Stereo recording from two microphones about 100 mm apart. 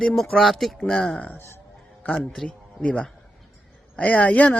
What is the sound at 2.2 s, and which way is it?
Speech, 5° left (ahead or behind).